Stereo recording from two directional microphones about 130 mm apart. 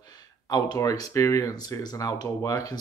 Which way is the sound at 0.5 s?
30° left (ahead or behind).